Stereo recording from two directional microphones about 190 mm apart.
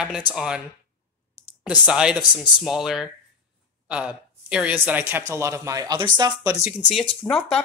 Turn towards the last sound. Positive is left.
turn(degrees=5)  # may be behind; listen again after turning